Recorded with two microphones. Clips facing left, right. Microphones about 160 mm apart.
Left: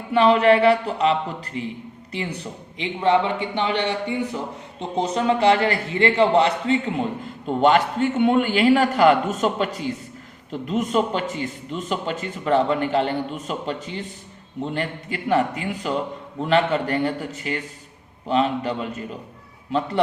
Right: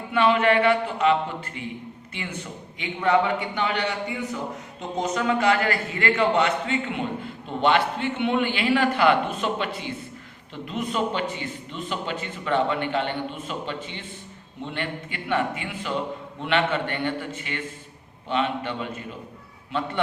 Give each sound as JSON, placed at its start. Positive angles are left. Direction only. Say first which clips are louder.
{"t": 0.1, "sound": "a man's voice", "louder": "left 4 dB", "side_deg": 35}